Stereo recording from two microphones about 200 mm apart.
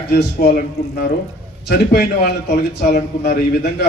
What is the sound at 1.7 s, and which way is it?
Speech, 55° left (ahead or behind).